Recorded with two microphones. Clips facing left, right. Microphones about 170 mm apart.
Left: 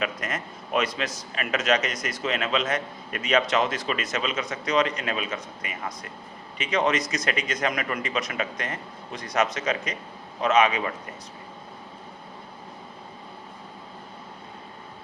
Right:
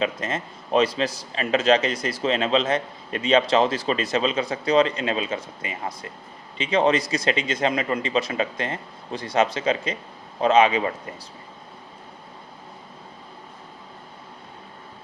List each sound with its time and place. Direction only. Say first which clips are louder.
0.0 s a man's voice: right 4 dB; 25° right (ahead or behind)